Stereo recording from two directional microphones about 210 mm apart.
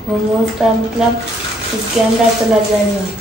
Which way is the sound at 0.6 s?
Centre (ahead or behind).